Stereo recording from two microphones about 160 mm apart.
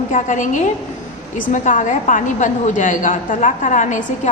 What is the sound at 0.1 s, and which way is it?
A woman's voice, 50° left (ahead or behind).